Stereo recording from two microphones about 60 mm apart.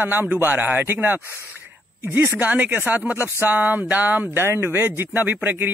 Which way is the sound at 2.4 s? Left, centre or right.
Right.